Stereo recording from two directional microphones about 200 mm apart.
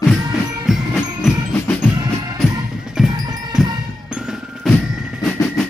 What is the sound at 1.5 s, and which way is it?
Music, 10° left (ahead or behind).